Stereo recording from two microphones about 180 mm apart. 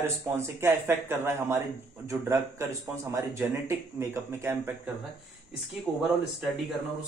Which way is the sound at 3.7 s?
15° right (ahead or behind).